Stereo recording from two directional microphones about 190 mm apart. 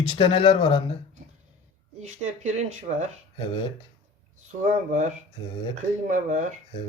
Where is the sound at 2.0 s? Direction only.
35° right (ahead or behind).